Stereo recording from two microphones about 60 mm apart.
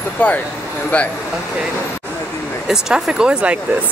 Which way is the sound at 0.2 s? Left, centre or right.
Left.